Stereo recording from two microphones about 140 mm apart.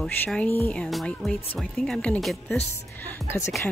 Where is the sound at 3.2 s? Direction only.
20° left (ahead or behind).